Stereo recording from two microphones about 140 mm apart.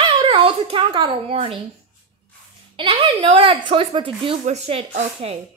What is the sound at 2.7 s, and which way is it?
A woman's voice, 40° right (ahead or behind).